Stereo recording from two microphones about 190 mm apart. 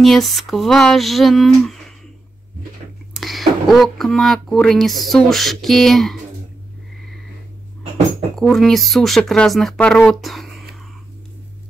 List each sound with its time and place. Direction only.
0.0 s speech: centre (ahead or behind)
3.2 s speech: centre (ahead or behind)
8.4 s speech: centre (ahead or behind)